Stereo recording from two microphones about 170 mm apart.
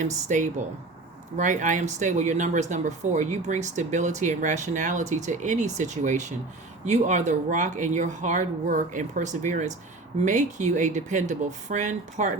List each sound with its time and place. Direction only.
0.0 s speech: 45° right (ahead or behind)